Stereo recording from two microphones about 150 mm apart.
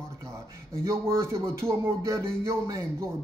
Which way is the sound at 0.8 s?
20° right (ahead or behind).